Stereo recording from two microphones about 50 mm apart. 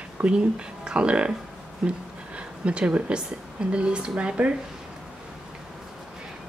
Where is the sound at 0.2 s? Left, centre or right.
Right.